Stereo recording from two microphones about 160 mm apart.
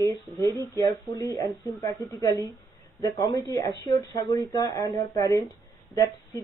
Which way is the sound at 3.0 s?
25° left (ahead or behind).